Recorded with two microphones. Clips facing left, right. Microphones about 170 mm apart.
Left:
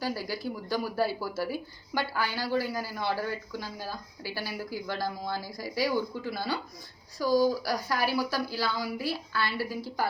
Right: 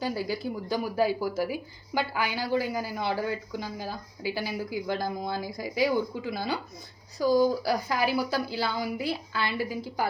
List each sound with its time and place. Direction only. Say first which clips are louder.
0.0 s a woman's voice: right 3 dB; 20° right (ahead or behind)